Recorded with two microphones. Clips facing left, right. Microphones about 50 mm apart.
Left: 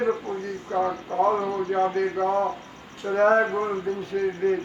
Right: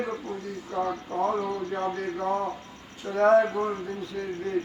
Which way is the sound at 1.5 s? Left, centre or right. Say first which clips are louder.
Left 5 dB; left.